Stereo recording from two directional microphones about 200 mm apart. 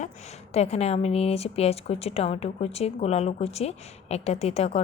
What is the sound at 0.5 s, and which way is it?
A woman's voice, 30° left (ahead or behind).